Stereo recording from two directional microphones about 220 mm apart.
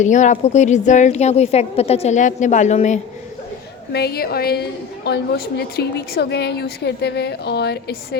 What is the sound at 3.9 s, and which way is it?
A woman's voice, 45° left (ahead or behind).